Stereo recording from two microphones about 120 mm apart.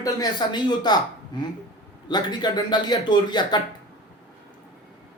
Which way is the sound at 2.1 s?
35° left (ahead or behind).